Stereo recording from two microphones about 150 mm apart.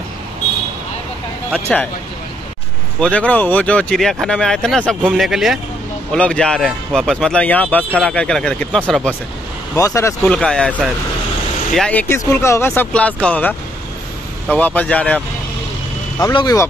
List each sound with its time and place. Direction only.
1.7 s speech: 5° left (ahead or behind)
3.0 s speech: 10° left (ahead or behind)
9.8 s speech: 20° left (ahead or behind)
10.2 s speech: 5° left (ahead or behind)
16.2 s speech: 25° left (ahead or behind)